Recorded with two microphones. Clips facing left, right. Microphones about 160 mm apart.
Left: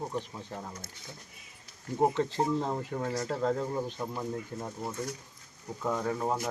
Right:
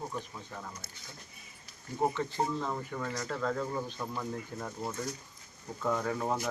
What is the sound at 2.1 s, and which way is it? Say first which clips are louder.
Speech: left 4 dB; 35° left (ahead or behind).